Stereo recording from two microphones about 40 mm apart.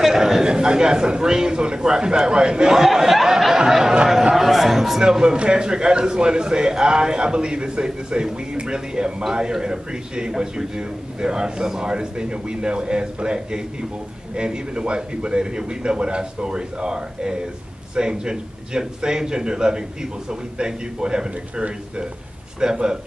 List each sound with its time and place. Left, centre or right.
0.0 s a man's voice: centre
2.8 s a sound: centre
4.4 s a man's voice: centre